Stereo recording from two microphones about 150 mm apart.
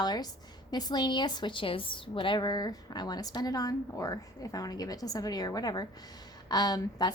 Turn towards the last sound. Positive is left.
turn(degrees=25)  # may be behind; listen again after turning